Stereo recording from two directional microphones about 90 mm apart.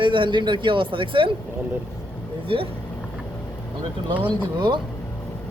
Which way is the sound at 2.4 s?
85° right.